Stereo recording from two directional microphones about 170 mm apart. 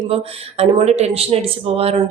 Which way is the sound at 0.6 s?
40° right (ahead or behind).